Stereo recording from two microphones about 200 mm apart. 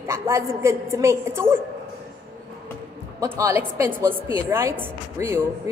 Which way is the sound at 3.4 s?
15° right (ahead or behind).